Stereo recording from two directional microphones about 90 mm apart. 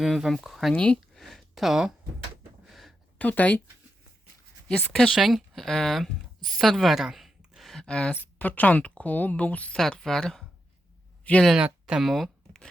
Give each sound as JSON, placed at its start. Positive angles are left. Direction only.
{"t": 0.0, "sound": "speech", "side_deg": 0}
{"t": 0.7, "sound": "speech", "side_deg": 10}
{"t": 1.2, "sound": "speech", "side_deg": 0}
{"t": 2.6, "sound": "a sound", "side_deg": 0}
{"t": 3.2, "sound": "speech", "side_deg": 15}
{"t": 4.9, "sound": "speech", "side_deg": 5}
{"t": 8.2, "sound": "speech", "side_deg": 20}
{"t": 9.7, "sound": "speech", "side_deg": 5}
{"t": 11.2, "sound": "speech", "side_deg": 15}
{"t": 11.6, "sound": "a sound", "side_deg": -5}